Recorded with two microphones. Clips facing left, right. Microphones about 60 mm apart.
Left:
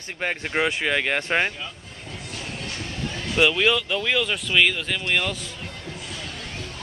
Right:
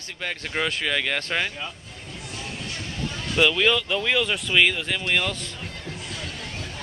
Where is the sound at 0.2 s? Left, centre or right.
Left.